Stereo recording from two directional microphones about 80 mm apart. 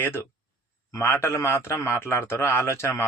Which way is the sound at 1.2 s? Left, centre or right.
Left.